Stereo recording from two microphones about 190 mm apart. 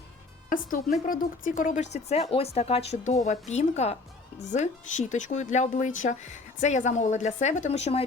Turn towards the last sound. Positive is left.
turn(degrees=35)  # may be behind; listen again after turning